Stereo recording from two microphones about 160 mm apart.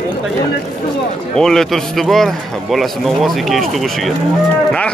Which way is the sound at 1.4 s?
5° left (ahead or behind).